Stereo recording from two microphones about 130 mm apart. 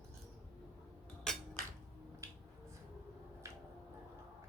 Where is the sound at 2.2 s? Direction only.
20° right (ahead or behind).